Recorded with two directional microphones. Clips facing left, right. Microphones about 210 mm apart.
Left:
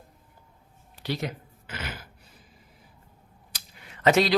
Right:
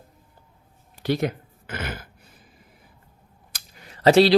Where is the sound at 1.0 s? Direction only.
50° right (ahead or behind).